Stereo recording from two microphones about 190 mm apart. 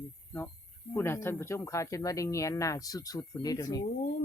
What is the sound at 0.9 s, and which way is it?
Speech, 15° left (ahead or behind).